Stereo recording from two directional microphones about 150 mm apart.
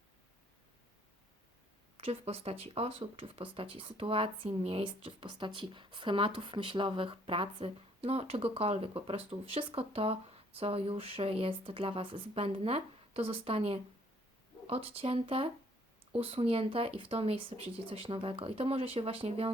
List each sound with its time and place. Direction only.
2.0 s speech: 40° right (ahead or behind)